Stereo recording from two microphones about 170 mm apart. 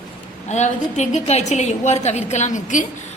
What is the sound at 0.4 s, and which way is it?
A woman's voice, 45° left (ahead or behind).